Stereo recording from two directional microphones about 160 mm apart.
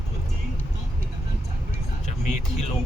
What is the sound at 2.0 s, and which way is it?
Music, 50° left (ahead or behind).